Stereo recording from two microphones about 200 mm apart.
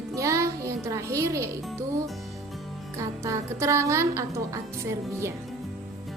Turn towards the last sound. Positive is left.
turn(degrees=-15)  # may be behind; listen again after turning